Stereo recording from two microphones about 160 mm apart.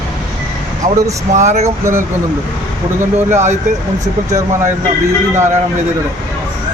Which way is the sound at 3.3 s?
45° right (ahead or behind).